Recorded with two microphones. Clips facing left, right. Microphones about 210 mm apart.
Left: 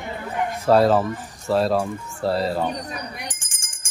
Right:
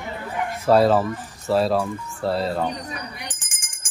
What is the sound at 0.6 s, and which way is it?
Speech, centre (ahead or behind).